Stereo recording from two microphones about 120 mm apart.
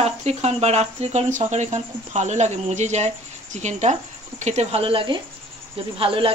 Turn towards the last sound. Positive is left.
turn(degrees=-50)  # may be behind; listen again after turning